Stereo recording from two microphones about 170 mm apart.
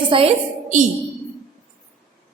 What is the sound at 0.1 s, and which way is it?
Speech, 30° right (ahead or behind).